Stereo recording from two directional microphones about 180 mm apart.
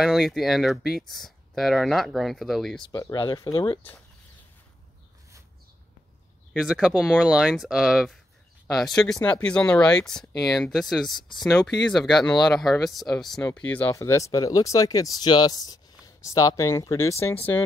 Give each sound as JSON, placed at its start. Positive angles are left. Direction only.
{"t": 0.0, "sound": "speech", "side_deg": 0}
{"t": 2.8, "sound": "speech", "side_deg": 20}
{"t": 6.5, "sound": "speech", "side_deg": 0}
{"t": 13.4, "sound": "speech", "side_deg": 20}